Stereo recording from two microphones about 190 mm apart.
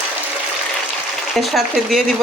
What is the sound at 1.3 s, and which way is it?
Frying, centre (ahead or behind).